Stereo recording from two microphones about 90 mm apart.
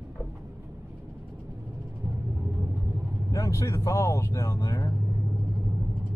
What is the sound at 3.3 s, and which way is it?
Speech, 35° left (ahead or behind).